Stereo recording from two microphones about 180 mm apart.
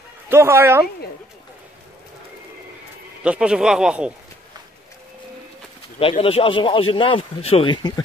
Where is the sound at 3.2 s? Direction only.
5° right (ahead or behind).